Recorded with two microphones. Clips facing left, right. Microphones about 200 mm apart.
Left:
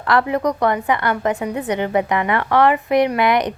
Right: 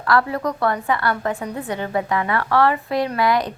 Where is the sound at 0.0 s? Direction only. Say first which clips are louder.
Left 2 dB; 20° left (ahead or behind).